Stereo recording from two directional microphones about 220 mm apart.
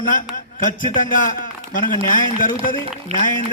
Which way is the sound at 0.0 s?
40° left (ahead or behind).